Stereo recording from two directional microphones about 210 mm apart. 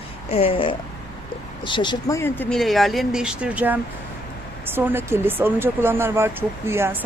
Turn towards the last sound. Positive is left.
turn(degrees=-10)  # may be behind; listen again after turning